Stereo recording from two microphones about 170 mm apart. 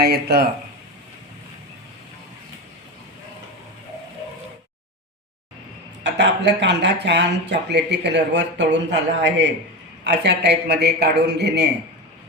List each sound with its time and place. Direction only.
0.0 s a man's voice: 70° right (ahead or behind)
6.0 s a man's voice: 90° right